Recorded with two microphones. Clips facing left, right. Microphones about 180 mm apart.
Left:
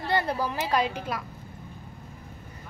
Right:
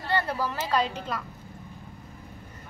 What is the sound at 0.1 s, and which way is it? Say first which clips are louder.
A woman's voice: left 1 dB; 15° left (ahead or behind).